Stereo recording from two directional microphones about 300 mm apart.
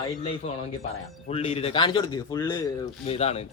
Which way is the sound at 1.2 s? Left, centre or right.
Centre.